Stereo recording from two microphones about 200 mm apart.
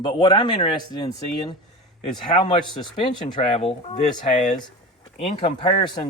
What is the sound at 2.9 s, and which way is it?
Speech, 25° left (ahead or behind).